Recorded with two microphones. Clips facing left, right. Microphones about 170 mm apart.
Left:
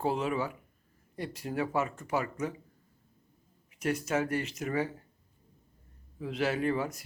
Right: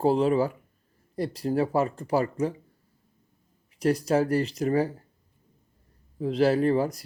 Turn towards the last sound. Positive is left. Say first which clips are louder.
# right 7 dB
turn(degrees=-35)  # may be behind; listen again after turning